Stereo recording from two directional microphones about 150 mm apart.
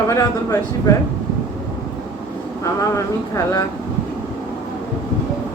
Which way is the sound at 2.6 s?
20° left (ahead or behind).